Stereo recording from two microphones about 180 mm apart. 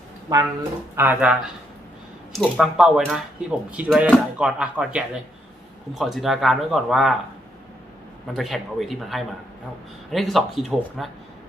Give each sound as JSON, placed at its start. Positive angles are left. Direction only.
{"t": 0.3, "sound": "speech", "side_deg": -20}
{"t": 0.9, "sound": "speech", "side_deg": -10}
{"t": 8.3, "sound": "speech", "side_deg": 0}